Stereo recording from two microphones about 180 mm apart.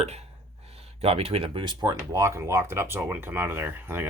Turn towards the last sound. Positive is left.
turn(degrees=-10)  # may be behind; listen again after turning